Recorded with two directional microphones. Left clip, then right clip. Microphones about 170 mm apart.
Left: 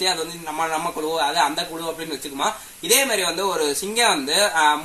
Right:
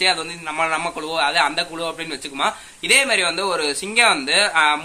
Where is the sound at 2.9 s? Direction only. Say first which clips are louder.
Right 3 dB; 20° right (ahead or behind).